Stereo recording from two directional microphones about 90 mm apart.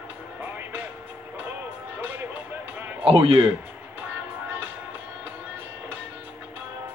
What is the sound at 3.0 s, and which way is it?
Speech, 90° right.